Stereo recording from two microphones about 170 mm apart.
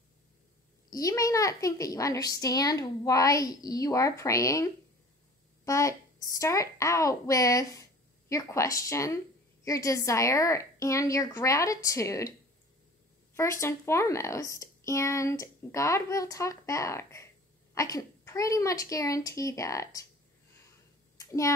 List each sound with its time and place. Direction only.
0.8 s a child's voice: 20° left (ahead or behind)
5.7 s a child's voice: 20° left (ahead or behind)
13.4 s a child's voice: 15° left (ahead or behind)
21.2 s a child's voice: 20° left (ahead or behind)